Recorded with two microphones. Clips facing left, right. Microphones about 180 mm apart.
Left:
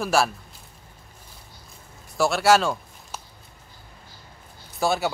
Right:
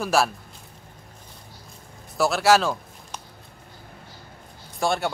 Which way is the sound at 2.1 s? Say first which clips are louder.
Even; centre (ahead or behind).